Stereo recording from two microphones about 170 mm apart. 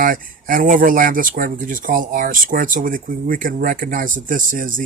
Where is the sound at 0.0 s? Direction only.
55° right (ahead or behind).